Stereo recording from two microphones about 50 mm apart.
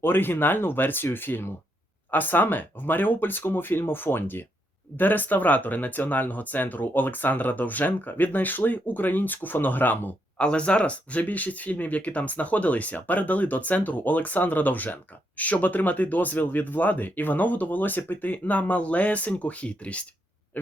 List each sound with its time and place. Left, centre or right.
0.0 s speech: left
10.3 s speech: left